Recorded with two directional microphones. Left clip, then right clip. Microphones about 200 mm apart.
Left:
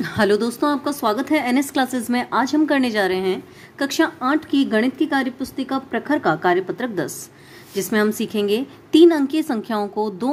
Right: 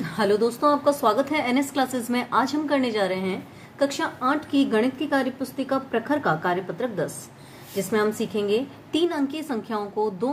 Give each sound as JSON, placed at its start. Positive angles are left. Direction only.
{"t": 0.0, "sound": "a woman's voice", "side_deg": 50}